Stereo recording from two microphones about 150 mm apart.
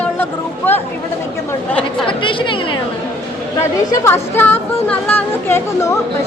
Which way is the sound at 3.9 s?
15° left (ahead or behind).